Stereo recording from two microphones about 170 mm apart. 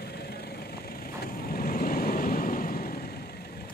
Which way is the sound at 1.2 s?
60° left (ahead or behind).